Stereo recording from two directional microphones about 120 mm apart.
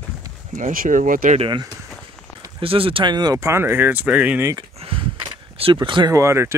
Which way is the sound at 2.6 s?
50° right (ahead or behind).